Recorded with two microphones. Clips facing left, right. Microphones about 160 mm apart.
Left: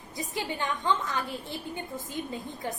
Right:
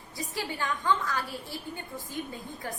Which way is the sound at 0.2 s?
20° left (ahead or behind).